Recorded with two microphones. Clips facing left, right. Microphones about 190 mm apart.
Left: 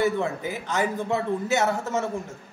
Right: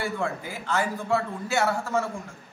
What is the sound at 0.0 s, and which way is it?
A man's voice, 20° left (ahead or behind).